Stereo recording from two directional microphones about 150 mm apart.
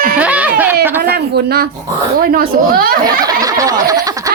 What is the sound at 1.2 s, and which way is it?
Speech, 90° right.